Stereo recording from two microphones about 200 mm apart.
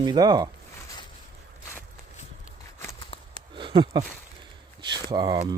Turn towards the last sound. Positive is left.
turn(degrees=-20)  # may be behind; listen again after turning